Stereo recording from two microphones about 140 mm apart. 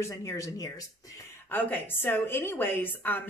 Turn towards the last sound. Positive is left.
turn(degrees=15)  # may be behind; listen again after turning